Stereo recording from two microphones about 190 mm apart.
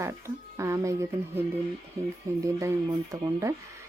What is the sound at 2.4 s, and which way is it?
Speech, 15° right (ahead or behind).